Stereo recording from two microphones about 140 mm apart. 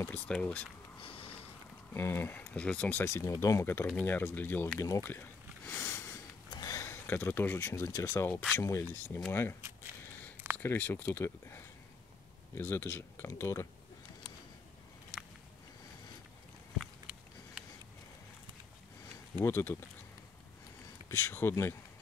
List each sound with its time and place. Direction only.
0.3 s speech: 10° left (ahead or behind)
1.0 s sniff: 45° left (ahead or behind)
2.0 s speech: 15° left (ahead or behind)
5.1 s sniff: 15° left (ahead or behind)
6.5 s speech: 25° left (ahead or behind)
10.6 s speech: 15° left (ahead or behind)
19.3 s speech: 15° left (ahead or behind)
21.1 s speech: 15° left (ahead or behind)